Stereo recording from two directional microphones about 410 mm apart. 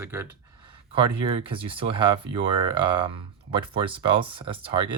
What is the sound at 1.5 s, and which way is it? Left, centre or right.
Speech, centre.